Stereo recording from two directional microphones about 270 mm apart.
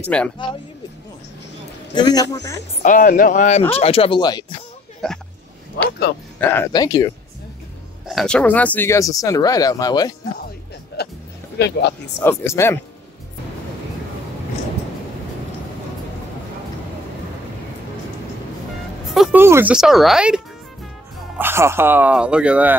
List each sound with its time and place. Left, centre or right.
0.1 s speech: centre
2.0 s speech: centre
2.8 s speech: left
5.0 s speech: centre
5.8 s music: left
6.4 s speech: centre
8.1 s speech: centre
11.0 s music: left
11.5 s speech: left
12.2 s speech: centre
19.0 s speech: centre